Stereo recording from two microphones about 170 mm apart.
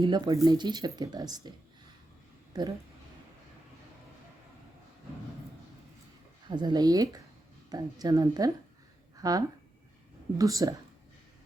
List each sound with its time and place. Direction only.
0.0 s speech: 25° right (ahead or behind)
6.5 s speech: 25° right (ahead or behind)
9.1 s a sound: 20° right (ahead or behind)
10.3 s speech: 20° right (ahead or behind)